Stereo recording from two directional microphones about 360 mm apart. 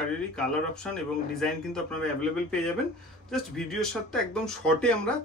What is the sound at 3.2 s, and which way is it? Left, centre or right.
Speech, centre.